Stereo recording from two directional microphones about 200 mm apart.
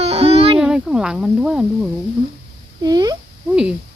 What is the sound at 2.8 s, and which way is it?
Speech, 20° right (ahead or behind).